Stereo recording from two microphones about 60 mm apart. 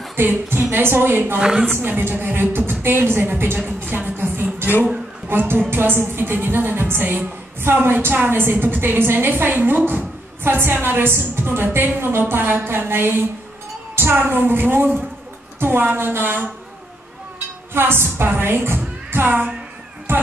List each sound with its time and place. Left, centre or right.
0.1 s a woman's voice: right
1.4 s a woman's voice: centre
1.7 s a woman's voice: right
17.7 s a woman's voice: right